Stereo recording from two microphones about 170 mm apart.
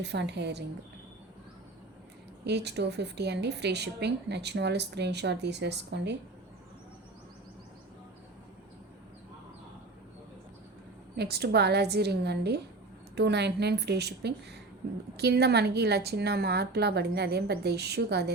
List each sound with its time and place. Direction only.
0.0 s a woman's voice: 85° right
2.4 s a woman's voice: 80° right
11.2 s a woman's voice: 70° right (ahead or behind)